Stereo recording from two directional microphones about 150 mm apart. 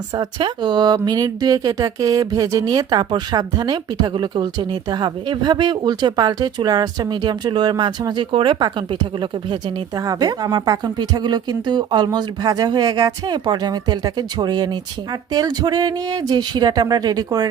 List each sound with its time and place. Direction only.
0.2 s speech: 30° right (ahead or behind)